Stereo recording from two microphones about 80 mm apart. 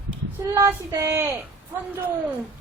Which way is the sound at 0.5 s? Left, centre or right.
Right.